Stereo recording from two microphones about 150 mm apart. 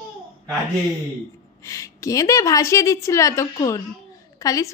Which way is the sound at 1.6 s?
20° left (ahead or behind).